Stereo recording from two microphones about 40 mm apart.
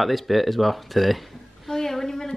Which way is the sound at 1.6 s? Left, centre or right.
Centre.